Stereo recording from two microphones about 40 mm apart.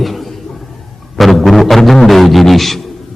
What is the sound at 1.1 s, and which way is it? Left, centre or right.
A man's voice, centre.